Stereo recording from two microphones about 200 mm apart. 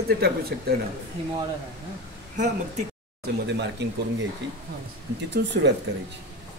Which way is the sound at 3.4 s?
60° right (ahead or behind).